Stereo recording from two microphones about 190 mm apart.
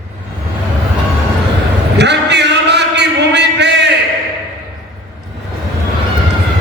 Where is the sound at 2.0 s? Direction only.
65° right (ahead or behind).